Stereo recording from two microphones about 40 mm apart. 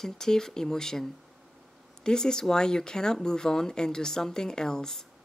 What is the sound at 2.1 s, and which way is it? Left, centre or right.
Speech, centre.